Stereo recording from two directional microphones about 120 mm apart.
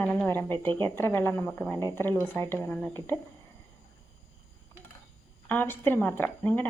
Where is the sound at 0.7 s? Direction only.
40° right (ahead or behind).